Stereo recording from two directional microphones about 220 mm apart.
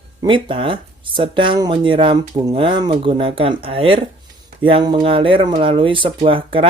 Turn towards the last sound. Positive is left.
turn(degrees=-25)  # may be behind; listen again after turning